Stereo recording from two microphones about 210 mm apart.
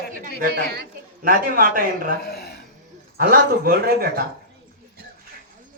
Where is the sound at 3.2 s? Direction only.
45° right (ahead or behind).